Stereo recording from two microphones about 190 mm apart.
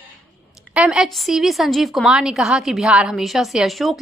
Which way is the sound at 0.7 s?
5° right (ahead or behind).